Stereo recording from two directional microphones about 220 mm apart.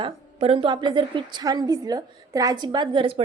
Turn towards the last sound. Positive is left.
turn(degrees=-25)  # may be behind; listen again after turning